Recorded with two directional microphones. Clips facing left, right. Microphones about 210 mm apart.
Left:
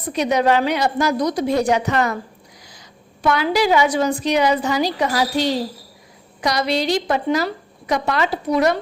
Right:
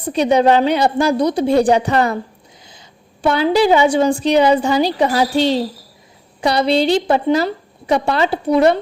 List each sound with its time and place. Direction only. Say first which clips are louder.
0.0 s a woman's voice: right 5 dB; 30° right (ahead or behind)